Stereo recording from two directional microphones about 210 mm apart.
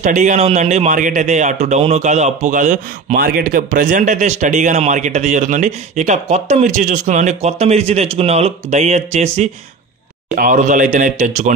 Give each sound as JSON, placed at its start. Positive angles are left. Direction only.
{"t": 0.0, "sound": "speech", "side_deg": -35}